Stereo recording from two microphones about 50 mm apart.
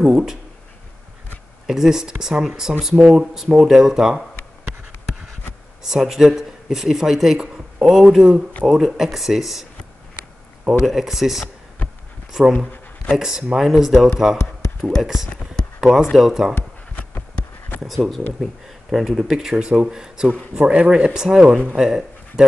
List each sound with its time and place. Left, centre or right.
0.0 s speech: centre
1.7 s speech: centre
5.9 s speech: centre
10.6 s speech: centre
10.9 s speech: centre
17.8 s speech: centre
19.5 s speech: right